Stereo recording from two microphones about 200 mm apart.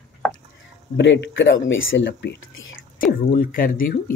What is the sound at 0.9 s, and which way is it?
Speech, 60° left (ahead or behind).